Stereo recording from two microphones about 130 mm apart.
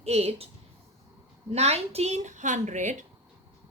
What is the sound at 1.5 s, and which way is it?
A woman's voice, 55° right (ahead or behind).